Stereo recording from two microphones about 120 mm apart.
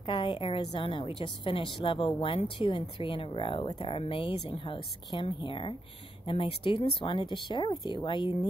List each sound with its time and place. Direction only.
0.0 s a woman's voice: 45° left (ahead or behind)